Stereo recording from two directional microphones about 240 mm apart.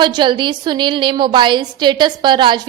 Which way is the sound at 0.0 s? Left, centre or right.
Centre.